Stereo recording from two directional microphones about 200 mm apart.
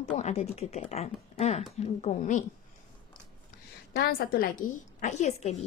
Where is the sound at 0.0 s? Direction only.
30° left (ahead or behind).